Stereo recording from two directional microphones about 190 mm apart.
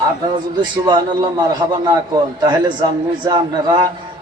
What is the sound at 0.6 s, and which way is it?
A man's voice, 25° right (ahead or behind).